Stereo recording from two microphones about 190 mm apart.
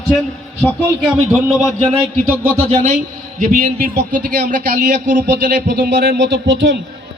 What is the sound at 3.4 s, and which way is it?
Speech, 45° right (ahead or behind).